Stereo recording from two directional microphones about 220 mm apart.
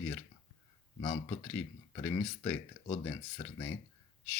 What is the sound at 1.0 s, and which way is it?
Speech, 25° left (ahead or behind).